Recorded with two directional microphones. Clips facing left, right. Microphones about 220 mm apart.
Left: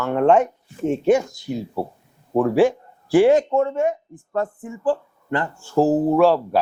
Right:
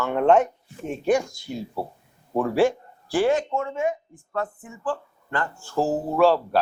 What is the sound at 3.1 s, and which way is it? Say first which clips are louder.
Speech: left 7 dB; 25° left (ahead or behind).